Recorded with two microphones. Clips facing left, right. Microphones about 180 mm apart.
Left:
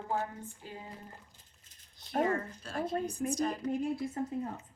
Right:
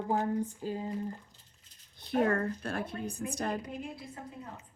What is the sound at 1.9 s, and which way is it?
A woman's voice, 60° right (ahead or behind).